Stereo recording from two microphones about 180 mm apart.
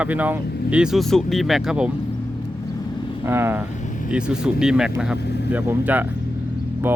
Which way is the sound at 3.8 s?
45° left (ahead or behind).